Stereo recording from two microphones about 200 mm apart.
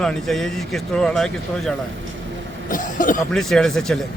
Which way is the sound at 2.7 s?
40° left (ahead or behind).